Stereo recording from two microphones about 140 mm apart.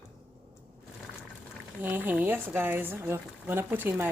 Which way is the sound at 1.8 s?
15° right (ahead or behind).